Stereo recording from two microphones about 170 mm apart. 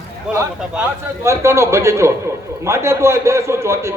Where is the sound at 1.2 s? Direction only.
15° right (ahead or behind).